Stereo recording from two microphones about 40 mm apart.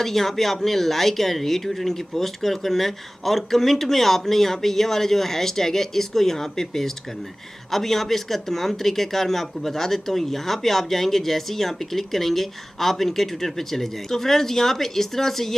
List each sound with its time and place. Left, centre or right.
0.0 s speech: centre